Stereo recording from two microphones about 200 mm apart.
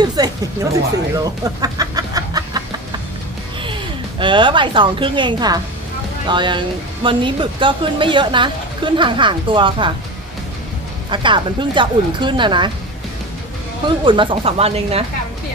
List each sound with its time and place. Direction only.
0.0 s a sound: 20° right (ahead or behind)
4.2 s speech: 25° right (ahead or behind)
11.1 s speech: 25° right (ahead or behind)
13.8 s speech: 25° right (ahead or behind)